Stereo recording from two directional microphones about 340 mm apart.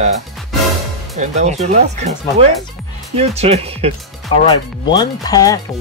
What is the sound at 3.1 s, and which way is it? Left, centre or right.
Speech, centre.